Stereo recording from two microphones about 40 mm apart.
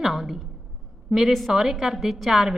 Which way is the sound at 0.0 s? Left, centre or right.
Centre.